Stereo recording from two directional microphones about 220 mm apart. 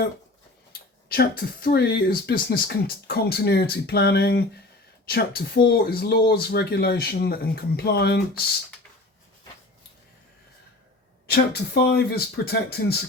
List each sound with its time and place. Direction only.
1.0 s speech: 45° left (ahead or behind)
11.3 s speech: 45° left (ahead or behind)